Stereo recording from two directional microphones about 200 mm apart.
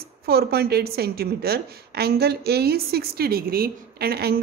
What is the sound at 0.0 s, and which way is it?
A woman's voice, 50° right (ahead or behind).